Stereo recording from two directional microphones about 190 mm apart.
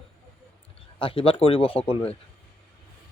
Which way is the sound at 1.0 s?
30° left (ahead or behind).